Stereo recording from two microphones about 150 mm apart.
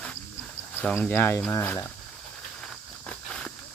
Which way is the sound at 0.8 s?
10° left (ahead or behind).